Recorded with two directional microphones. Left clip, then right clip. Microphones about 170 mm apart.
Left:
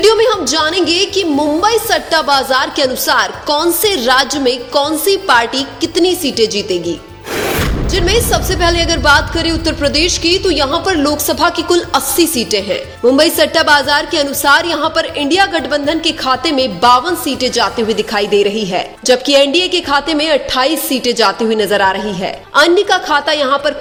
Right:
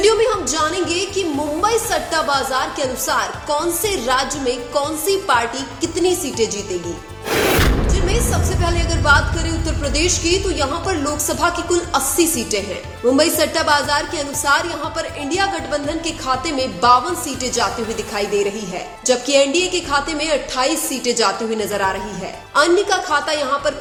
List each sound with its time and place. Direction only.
0.0 s music: 40° left (ahead or behind)
1.6 s a woman's voice: 40° left (ahead or behind)
7.3 s music: centre (ahead or behind)
8.0 s a woman's voice: 40° left (ahead or behind)